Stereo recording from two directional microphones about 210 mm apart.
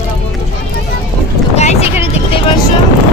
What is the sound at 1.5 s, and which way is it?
Boat, 30° left (ahead or behind).